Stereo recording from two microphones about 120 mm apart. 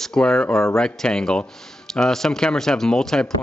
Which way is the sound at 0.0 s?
5° left (ahead or behind).